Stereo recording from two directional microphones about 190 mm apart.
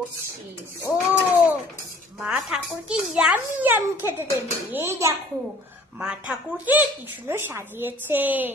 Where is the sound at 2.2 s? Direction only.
5° right (ahead or behind).